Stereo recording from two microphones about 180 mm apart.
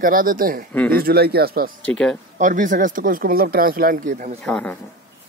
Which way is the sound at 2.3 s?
45° right (ahead or behind).